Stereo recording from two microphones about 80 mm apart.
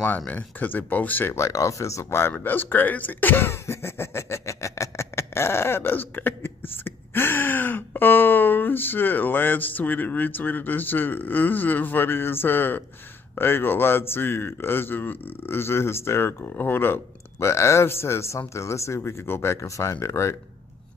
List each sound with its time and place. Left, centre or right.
0.3 s speech: centre
1.3 s speech: left